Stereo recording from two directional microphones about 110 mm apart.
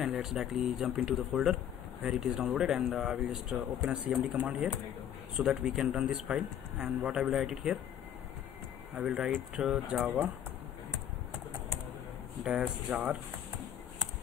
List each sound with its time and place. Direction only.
0.0 s speech: 5° right (ahead or behind)
8.9 s speech: 10° right (ahead or behind)
12.4 s speech: 10° right (ahead or behind)